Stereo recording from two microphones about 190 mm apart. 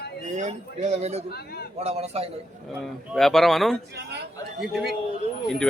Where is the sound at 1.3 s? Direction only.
55° left (ahead or behind).